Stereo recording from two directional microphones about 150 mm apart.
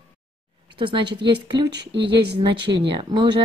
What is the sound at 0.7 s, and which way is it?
Speech, 35° right (ahead or behind).